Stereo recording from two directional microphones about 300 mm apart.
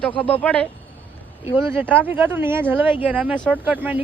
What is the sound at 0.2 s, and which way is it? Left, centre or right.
Speech, centre.